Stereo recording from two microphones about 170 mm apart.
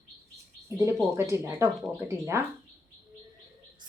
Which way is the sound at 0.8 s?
15° right (ahead or behind).